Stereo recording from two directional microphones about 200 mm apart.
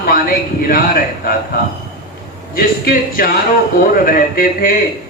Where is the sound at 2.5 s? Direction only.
45° left (ahead or behind).